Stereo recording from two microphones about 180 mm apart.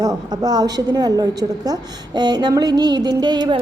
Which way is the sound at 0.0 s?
20° right (ahead or behind).